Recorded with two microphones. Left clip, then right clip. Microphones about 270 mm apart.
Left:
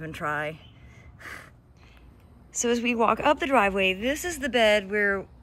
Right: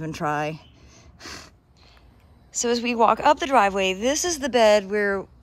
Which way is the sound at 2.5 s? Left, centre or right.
Centre.